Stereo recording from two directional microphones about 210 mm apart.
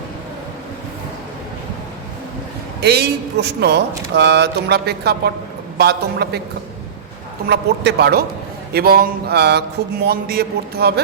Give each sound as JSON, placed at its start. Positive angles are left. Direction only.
{"t": 2.8, "sound": "speech", "side_deg": -50}
{"t": 7.4, "sound": "speech", "side_deg": -50}